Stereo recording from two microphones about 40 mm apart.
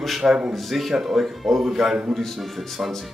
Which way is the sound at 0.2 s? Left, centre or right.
Right.